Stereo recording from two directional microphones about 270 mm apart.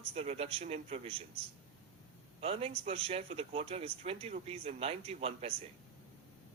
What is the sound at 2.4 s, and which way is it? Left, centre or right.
Speech, right.